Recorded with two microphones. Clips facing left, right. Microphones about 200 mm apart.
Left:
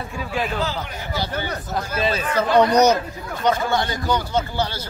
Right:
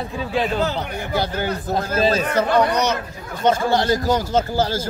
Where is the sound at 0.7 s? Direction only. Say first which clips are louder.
Right 4 dB; 60° right (ahead or behind).